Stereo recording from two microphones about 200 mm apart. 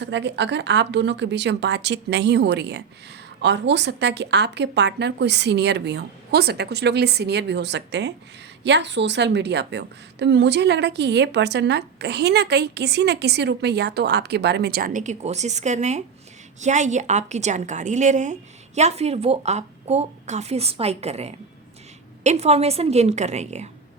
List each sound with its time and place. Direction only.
0.0 s a woman's voice: 60° right (ahead or behind); by 23.6 s 35° right (ahead or behind)